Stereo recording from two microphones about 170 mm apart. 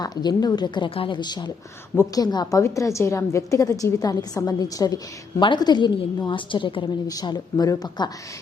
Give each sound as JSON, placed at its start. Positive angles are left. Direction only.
{"t": 0.0, "sound": "a woman's voice", "side_deg": 25}